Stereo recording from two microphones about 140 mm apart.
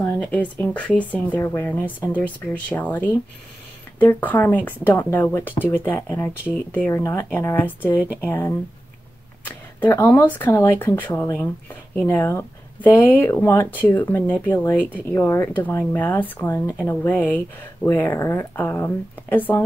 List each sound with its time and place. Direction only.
0.0 s speech: 10° left (ahead or behind)
9.8 s speech: 15° left (ahead or behind)